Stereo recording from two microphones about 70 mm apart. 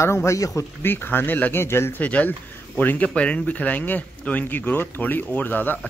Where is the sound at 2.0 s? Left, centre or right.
Left.